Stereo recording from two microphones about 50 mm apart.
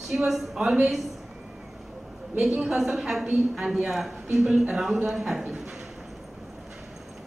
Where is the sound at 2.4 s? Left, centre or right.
Centre.